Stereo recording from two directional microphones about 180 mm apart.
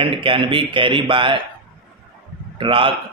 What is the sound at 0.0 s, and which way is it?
A man's voice, 30° right (ahead or behind).